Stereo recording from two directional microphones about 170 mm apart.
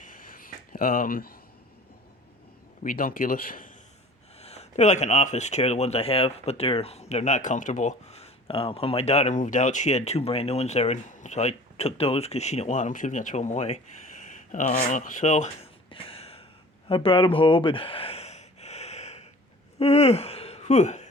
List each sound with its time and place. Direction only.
0.0 s a sound: 55° left (ahead or behind)
2.8 s speech: 55° left (ahead or behind)
4.4 s speech: 40° left (ahead or behind)
15.9 s a sound: 35° left (ahead or behind)
16.9 s gasp: 30° left (ahead or behind)
19.8 s speech: 40° left (ahead or behind)